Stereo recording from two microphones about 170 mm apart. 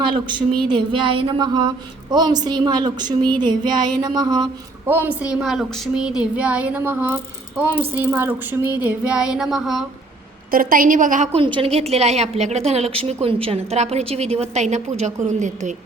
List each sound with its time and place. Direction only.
0.0 s a woman's voice: 30° right (ahead or behind)
4.9 s a woman's voice: 10° right (ahead or behind)
5.3 s a woman's voice: centre (ahead or behind)
10.5 s a woman's voice: 55° right (ahead or behind)
11.3 s a woman's voice: 30° right (ahead or behind); by 15.7 s 45° right (ahead or behind)